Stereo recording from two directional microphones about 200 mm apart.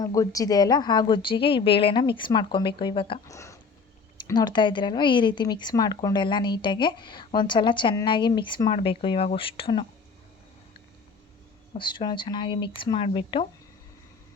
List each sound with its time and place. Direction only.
0.0 s speech: 15° left (ahead or behind)
3.3 s a sound: 15° left (ahead or behind)
4.3 s speech: 20° left (ahead or behind)
11.7 s speech: 25° left (ahead or behind)